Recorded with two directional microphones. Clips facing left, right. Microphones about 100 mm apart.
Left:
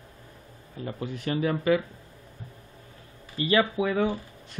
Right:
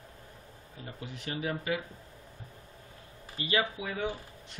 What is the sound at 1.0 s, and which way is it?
Speech, 55° left (ahead or behind).